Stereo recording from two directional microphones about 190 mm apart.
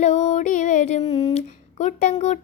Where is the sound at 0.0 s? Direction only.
40° left (ahead or behind).